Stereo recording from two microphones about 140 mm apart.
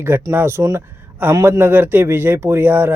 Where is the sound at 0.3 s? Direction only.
20° right (ahead or behind).